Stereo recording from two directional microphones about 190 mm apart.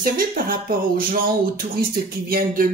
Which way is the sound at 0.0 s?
50° right (ahead or behind).